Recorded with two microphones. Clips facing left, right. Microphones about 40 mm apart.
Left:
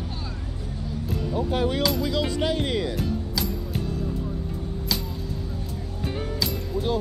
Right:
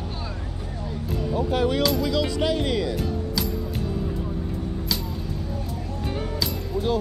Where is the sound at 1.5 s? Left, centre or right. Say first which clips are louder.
Right 2 dB; right.